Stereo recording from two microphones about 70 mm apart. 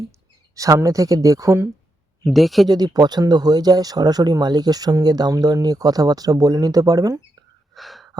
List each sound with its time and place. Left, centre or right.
0.5 s speech: right
2.2 s speech: centre
2.6 s speech: right
7.7 s a sound: centre